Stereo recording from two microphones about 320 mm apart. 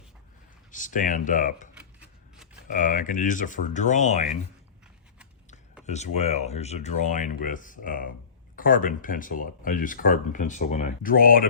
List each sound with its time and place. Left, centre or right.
0.7 s speech: left
2.0 s typewriter: centre
2.6 s speech: left
5.8 s speech: left